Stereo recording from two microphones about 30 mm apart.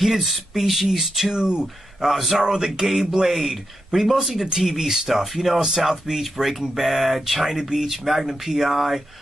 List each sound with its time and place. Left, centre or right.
0.0 s speech: centre
1.3 s speech: right
2.0 s a man's voice: centre
2.3 s speech: right; by 5.6 s centre
5.9 s speech: centre
6.8 s speech: centre